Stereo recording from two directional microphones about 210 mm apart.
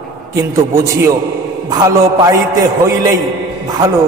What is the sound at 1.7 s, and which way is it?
A man's voice, 15° right (ahead or behind).